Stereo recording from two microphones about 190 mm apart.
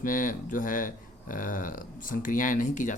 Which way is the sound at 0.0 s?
45° left (ahead or behind).